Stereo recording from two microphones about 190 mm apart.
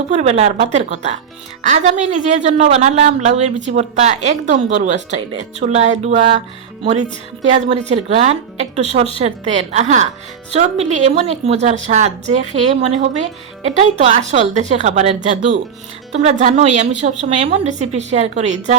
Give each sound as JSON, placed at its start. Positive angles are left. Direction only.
{"t": 0.1, "sound": "a woman's voice", "side_deg": -35}
{"t": 7.5, "sound": "a woman's voice", "side_deg": -35}